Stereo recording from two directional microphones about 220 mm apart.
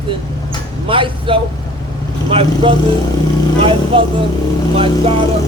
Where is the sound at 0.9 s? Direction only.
25° right (ahead or behind).